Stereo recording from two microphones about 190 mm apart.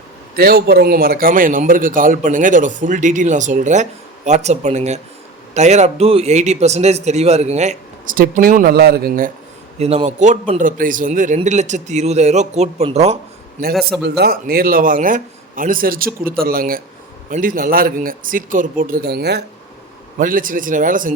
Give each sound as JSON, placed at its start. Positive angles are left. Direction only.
{"t": 0.3, "sound": "a man's voice", "side_deg": -55}
{"t": 9.7, "sound": "a man's voice", "side_deg": -35}
{"t": 14.0, "sound": "a man's voice", "side_deg": -55}
{"t": 20.1, "sound": "a man's voice", "side_deg": -45}